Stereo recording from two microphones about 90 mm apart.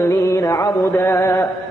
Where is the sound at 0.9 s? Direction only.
25° left (ahead or behind).